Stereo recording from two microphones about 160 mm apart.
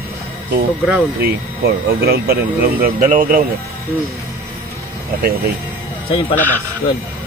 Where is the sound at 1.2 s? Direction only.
75° right (ahead or behind); by 3.4 s 55° right (ahead or behind).